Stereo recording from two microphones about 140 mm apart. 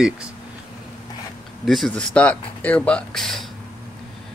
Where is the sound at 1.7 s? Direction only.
Centre (ahead or behind).